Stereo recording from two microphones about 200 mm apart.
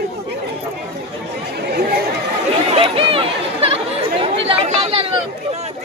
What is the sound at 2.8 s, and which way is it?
Chatter, 25° right (ahead or behind).